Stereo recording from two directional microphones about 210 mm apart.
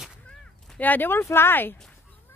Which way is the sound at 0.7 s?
10° left (ahead or behind).